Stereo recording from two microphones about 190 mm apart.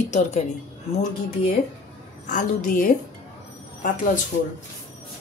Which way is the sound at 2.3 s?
45° left (ahead or behind).